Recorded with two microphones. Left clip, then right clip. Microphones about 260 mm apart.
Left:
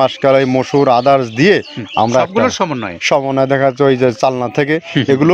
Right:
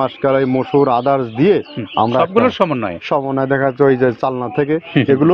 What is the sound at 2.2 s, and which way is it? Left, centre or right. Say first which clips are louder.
Speech: even; centre.